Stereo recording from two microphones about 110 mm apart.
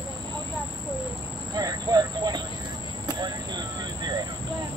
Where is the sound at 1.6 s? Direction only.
35° right (ahead or behind).